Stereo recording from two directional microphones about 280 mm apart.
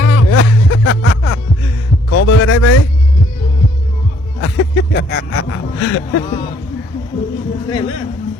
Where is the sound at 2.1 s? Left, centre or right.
Left.